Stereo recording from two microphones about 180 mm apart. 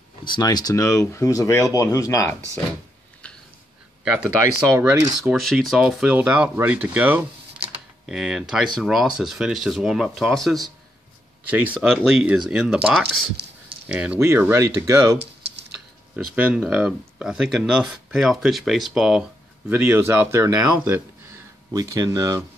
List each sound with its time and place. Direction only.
0.2 s speech: 25° left (ahead or behind)
4.0 s speech: 5° right (ahead or behind)
4.6 s speech: 15° right (ahead or behind)
5.3 s speech: centre (ahead or behind); by 15.1 s 15° right (ahead or behind)
16.3 s speech: 5° right (ahead or behind)
21.7 s speech: 20° right (ahead or behind)